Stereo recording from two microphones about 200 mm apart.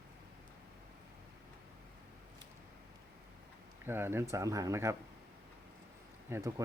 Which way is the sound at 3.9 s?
10° right (ahead or behind).